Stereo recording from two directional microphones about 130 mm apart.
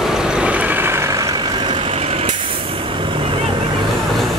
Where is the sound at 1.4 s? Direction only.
35° right (ahead or behind).